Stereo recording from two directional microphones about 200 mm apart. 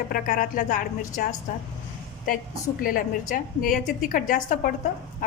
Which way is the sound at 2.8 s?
45° left (ahead or behind).